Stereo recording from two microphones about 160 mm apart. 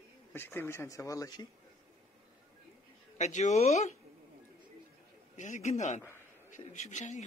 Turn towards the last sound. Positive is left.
turn(degrees=50)  # may be behind; listen again after turning